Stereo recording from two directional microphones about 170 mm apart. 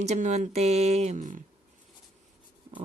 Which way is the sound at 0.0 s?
40° right (ahead or behind).